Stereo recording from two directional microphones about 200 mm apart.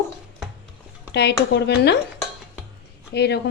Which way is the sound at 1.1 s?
55° left (ahead or behind).